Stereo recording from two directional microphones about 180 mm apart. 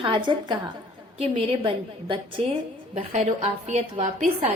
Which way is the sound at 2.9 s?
40° right (ahead or behind).